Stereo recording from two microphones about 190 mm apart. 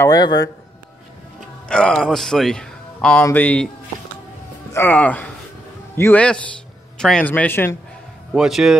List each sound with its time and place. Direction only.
0.0 s a man's voice: 20° left (ahead or behind)
1.7 s speech: 5° left (ahead or behind)
4.7 s a man's voice: 10° left (ahead or behind)
8.3 s speech: centre (ahead or behind)